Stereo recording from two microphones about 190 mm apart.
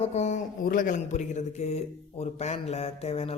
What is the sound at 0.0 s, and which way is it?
Speech, 35° left (ahead or behind).